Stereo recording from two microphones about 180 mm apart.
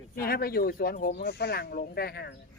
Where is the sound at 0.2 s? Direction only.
55° left (ahead or behind).